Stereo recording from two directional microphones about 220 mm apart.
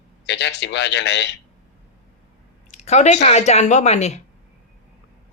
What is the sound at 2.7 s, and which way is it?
Speech, 30° left (ahead or behind).